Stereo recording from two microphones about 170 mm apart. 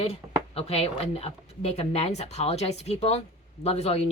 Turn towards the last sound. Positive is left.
turn(degrees=35)  # may be behind; listen again after turning